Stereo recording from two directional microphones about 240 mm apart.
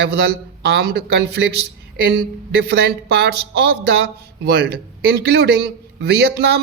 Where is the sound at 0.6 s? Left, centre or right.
Right.